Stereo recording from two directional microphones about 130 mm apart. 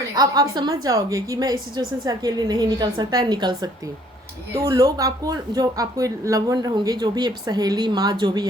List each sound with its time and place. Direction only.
0.1 s speech: 30° right (ahead or behind)